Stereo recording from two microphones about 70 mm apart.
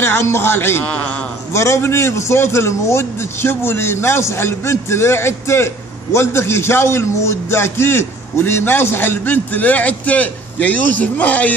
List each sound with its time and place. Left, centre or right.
0.0 s a man's voice: left